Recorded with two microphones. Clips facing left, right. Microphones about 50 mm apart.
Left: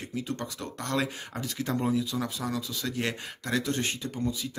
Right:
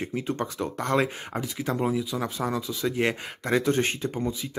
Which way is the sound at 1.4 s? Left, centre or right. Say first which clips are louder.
Right 1 dB; centre.